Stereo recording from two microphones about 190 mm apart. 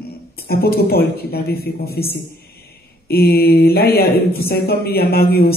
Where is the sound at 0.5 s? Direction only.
55° left (ahead or behind).